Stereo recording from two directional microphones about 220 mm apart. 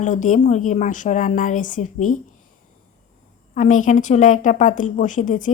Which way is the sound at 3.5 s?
35° left (ahead or behind).